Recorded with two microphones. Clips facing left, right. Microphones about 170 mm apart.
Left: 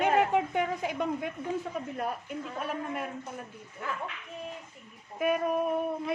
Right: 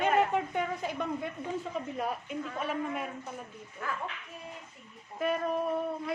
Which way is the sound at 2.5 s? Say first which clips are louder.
Even; centre (ahead or behind).